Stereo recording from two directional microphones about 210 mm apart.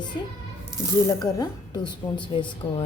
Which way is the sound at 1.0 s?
20° left (ahead or behind).